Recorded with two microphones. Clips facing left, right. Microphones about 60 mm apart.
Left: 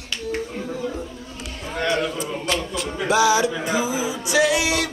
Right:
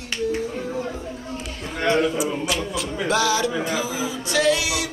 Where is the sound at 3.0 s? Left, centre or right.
Centre.